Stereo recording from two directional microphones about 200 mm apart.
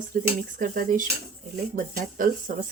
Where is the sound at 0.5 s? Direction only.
40° right (ahead or behind).